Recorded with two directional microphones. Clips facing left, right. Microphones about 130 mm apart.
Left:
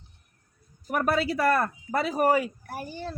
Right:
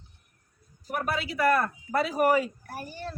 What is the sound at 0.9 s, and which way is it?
A man's voice, 45° left (ahead or behind).